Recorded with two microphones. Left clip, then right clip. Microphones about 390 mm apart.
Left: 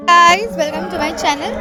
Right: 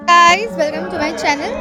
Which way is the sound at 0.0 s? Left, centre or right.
Centre.